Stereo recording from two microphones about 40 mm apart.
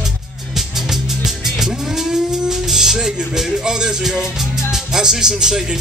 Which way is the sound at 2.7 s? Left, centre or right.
Centre.